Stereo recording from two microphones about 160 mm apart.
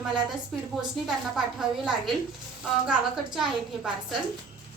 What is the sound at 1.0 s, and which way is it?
Speech, centre (ahead or behind).